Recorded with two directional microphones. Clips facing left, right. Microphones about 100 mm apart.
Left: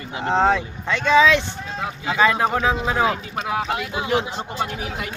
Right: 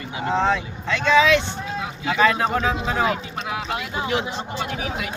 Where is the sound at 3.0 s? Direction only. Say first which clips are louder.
Left 1 dB; 40° left (ahead or behind).